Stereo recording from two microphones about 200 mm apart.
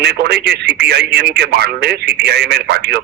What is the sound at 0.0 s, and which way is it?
Speech, 55° right (ahead or behind).